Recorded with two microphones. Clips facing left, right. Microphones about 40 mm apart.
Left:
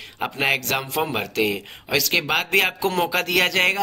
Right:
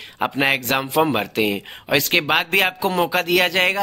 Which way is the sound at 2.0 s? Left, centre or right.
Right.